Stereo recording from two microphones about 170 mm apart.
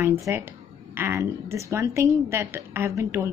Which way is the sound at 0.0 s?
15° right (ahead or behind).